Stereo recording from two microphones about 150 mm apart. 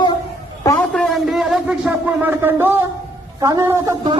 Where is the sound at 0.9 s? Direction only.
Centre (ahead or behind); by 2.8 s 15° right (ahead or behind).